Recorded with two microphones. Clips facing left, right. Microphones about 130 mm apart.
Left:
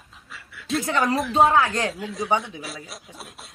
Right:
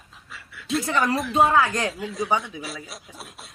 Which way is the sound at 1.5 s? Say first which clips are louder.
Even; 30° left (ahead or behind).